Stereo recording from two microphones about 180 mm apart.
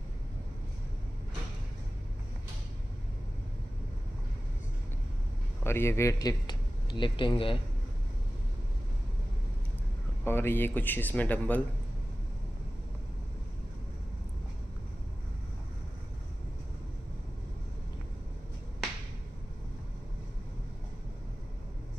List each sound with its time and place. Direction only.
5.6 s speech: 15° left (ahead or behind); by 7.6 s 30° left (ahead or behind)
10.2 s speech: 10° left (ahead or behind)